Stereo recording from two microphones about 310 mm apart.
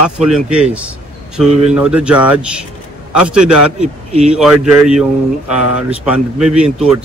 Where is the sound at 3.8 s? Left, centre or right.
Centre.